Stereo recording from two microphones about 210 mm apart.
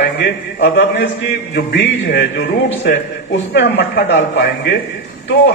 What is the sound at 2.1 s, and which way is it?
A man's voice, 50° left (ahead or behind).